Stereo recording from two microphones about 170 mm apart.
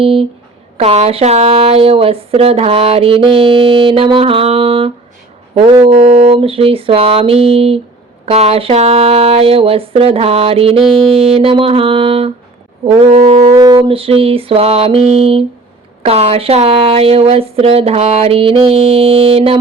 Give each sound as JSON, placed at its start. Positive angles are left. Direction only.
{"t": 0.0, "sound": "speech", "side_deg": -35}